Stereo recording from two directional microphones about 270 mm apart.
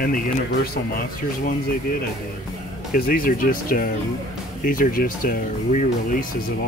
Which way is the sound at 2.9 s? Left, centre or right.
Left.